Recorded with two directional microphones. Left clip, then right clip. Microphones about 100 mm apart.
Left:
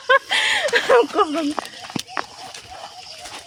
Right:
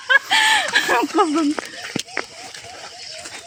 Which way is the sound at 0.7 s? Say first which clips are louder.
Left 2 dB; 70° left (ahead or behind).